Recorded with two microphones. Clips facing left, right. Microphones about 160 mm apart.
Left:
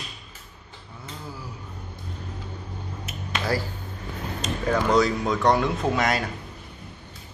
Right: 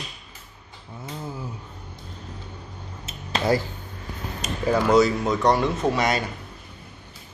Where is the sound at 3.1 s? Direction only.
25° right (ahead or behind).